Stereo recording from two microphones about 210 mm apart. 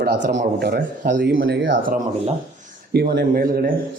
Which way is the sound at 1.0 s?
40° right (ahead or behind).